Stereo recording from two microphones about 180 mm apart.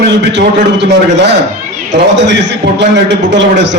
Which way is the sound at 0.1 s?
75° right (ahead or behind).